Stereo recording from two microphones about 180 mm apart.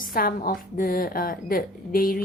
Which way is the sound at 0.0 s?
55° left (ahead or behind).